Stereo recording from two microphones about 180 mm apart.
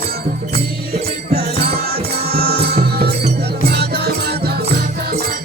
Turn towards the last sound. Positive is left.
turn(degrees=-55)  # may be behind; listen again after turning